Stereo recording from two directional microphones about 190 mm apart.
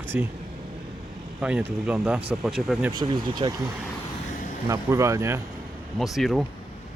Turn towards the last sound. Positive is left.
turn(degrees=0)  # may be behind; listen again after turning